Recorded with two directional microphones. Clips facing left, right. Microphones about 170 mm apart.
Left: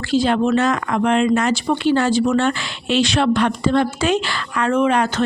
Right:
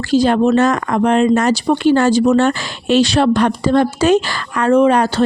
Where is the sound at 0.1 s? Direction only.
40° right (ahead or behind).